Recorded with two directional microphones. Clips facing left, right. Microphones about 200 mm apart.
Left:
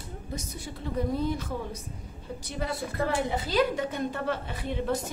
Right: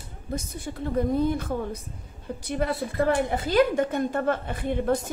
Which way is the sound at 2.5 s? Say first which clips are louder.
Right 6 dB; 55° right (ahead or behind).